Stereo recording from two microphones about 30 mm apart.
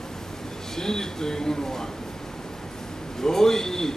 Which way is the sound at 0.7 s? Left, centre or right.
Centre.